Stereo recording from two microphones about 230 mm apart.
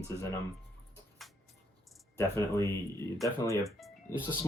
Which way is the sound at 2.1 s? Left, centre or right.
Centre.